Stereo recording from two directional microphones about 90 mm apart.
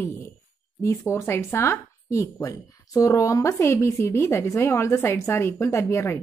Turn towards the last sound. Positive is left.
turn(degrees=30)  # may be behind; listen again after turning